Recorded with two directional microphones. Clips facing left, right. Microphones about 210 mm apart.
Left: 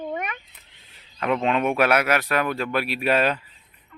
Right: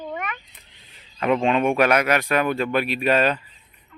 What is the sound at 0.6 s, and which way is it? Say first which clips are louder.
Speech: right 2 dB; centre (ahead or behind).